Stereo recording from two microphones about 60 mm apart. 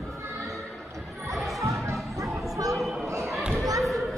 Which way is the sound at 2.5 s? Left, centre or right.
Right.